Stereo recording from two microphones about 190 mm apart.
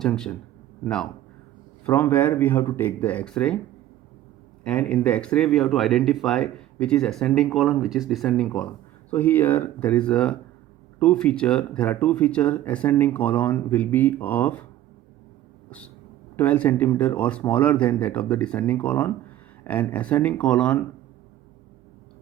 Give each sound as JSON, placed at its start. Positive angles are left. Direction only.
{"t": 0.0, "sound": "speech", "side_deg": 5}
{"t": 1.8, "sound": "speech", "side_deg": 10}
{"t": 4.6, "sound": "speech", "side_deg": 5}
{"t": 16.3, "sound": "speech", "side_deg": 10}